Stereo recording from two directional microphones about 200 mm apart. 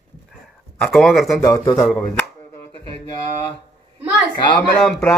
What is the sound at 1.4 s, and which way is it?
Speech, 20° left (ahead or behind).